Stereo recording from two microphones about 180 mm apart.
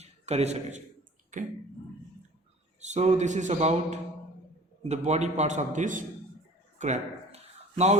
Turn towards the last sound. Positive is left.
turn(degrees=-40)  # may be behind; listen again after turning